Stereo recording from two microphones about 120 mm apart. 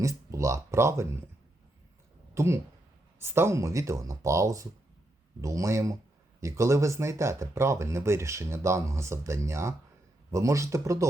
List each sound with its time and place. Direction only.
0.0 s speech: 25° right (ahead or behind)
2.3 s speech: 25° right (ahead or behind)